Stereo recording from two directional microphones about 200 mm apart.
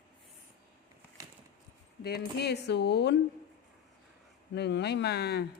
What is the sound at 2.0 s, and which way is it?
Speech, 55° left (ahead or behind).